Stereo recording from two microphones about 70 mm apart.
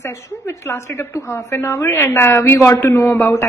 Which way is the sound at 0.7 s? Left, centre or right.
Left.